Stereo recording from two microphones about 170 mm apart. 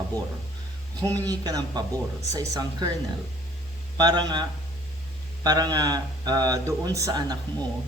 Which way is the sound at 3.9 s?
25° right (ahead or behind).